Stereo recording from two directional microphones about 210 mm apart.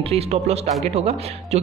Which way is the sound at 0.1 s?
30° right (ahead or behind).